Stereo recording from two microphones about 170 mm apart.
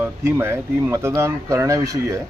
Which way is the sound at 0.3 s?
15° right (ahead or behind).